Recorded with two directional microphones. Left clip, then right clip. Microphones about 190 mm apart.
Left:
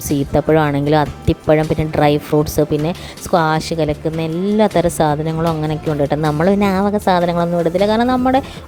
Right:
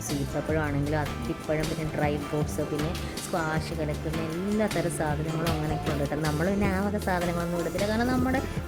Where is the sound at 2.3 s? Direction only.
40° left (ahead or behind).